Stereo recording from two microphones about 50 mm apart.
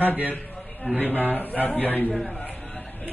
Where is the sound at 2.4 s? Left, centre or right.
Left.